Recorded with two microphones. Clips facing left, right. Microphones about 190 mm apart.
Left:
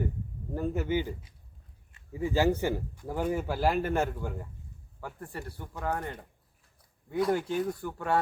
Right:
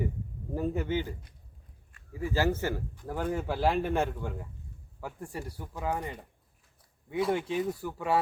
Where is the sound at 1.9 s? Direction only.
20° left (ahead or behind); by 4.4 s centre (ahead or behind).